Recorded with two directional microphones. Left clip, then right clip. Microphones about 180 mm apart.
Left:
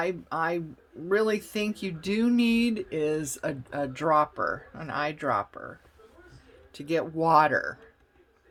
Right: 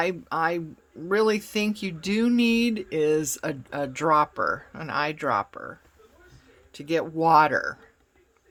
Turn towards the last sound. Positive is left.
turn(degrees=-20)  # may be behind; listen again after turning